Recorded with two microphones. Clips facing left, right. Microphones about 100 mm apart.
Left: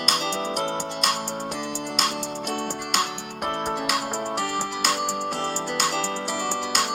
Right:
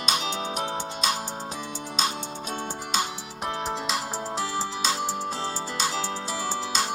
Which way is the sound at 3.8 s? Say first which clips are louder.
Left 3 dB; 75° left (ahead or behind).